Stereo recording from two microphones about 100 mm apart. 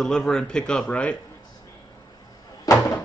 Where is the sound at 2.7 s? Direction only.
40° left (ahead or behind).